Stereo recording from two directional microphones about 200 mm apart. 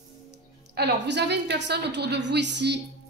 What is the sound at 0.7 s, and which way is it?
A woman's voice, 55° right (ahead or behind).